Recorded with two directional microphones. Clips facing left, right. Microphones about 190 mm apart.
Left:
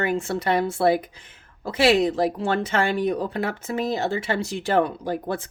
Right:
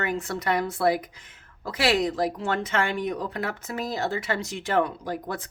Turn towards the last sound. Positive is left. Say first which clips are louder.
# left 5 dB
turn(degrees=30)  # may be behind; listen again after turning